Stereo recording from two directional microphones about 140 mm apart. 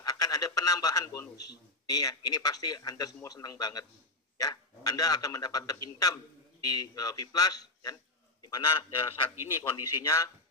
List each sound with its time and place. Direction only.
0.0 s radio: 25° left (ahead or behind)
0.6 s a man's voice: 25° left (ahead or behind)